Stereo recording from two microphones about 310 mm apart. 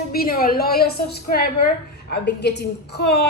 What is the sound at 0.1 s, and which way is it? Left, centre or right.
A woman's voice, left.